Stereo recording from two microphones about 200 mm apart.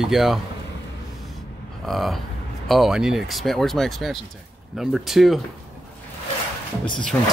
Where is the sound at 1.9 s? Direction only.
Centre (ahead or behind).